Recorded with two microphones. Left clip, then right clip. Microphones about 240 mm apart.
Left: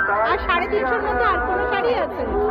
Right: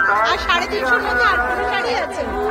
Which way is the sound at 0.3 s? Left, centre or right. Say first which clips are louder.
Right 2 dB; centre.